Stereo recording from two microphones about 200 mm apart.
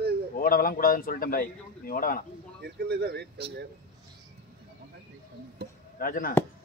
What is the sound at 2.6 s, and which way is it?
Speech, 55° right (ahead or behind).